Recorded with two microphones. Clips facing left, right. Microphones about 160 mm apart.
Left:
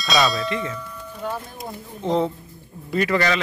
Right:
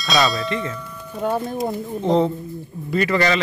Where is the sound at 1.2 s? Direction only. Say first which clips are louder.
Right 7 dB; 55° right (ahead or behind).